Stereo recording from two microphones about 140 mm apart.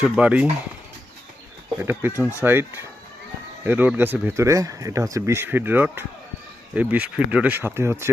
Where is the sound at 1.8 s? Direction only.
15° right (ahead or behind).